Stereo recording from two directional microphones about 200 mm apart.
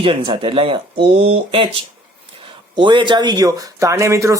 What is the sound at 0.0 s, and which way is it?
Speech, 25° right (ahead or behind).